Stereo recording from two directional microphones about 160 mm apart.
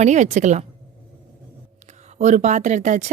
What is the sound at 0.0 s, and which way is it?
Speech, 50° right (ahead or behind).